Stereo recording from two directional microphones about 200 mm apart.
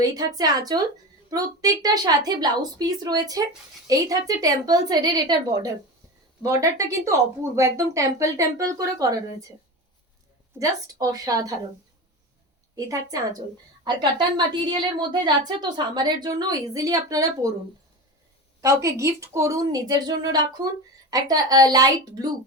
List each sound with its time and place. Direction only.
0.0 s a woman's voice: 20° right (ahead or behind)
10.6 s speech: 15° right (ahead or behind)
12.7 s a woman's voice: 15° right (ahead or behind)
18.6 s a woman's voice: 15° right (ahead or behind)